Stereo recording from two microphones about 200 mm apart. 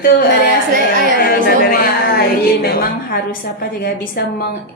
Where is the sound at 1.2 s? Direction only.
50° left (ahead or behind).